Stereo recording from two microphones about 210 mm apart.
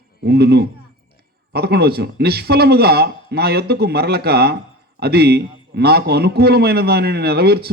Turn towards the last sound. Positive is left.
turn(degrees=-50)  # may be behind; listen again after turning